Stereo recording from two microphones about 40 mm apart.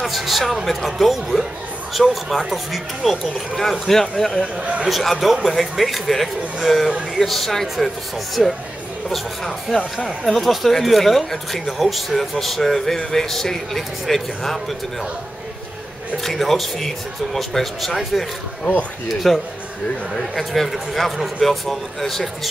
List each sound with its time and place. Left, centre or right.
0.0 s speech: centre
3.0 s speech: centre
3.8 s a man's voice: centre
4.6 s a man's voice: right
4.8 s speech: centre
16.2 s speech: centre